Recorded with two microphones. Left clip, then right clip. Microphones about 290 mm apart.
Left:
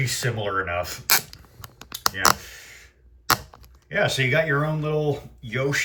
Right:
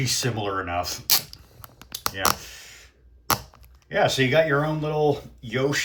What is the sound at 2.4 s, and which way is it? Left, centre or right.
Clicking, centre.